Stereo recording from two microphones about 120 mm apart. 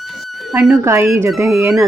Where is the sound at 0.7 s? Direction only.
25° right (ahead or behind).